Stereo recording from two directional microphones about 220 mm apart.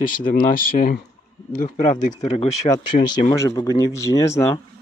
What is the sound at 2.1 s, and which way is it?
Speech, 30° left (ahead or behind).